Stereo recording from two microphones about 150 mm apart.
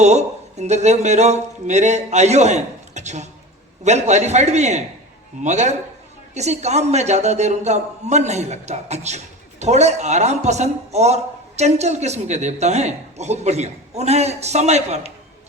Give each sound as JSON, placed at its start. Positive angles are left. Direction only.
{"t": 0.0, "sound": "a man's voice", "side_deg": -50}